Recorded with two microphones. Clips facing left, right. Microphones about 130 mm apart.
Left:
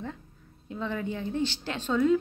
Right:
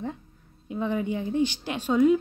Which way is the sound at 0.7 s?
15° right (ahead or behind).